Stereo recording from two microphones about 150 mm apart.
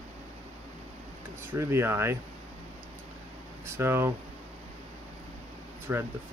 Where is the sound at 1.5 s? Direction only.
15° right (ahead or behind).